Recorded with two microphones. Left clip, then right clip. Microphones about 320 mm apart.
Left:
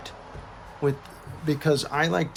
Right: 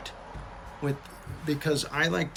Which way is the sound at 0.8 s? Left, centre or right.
Centre.